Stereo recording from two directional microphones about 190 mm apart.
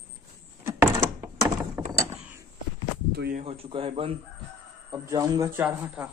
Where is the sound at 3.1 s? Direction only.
55° right (ahead or behind).